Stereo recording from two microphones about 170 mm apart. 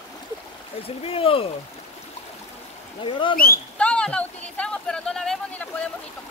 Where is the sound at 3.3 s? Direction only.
60° left (ahead or behind).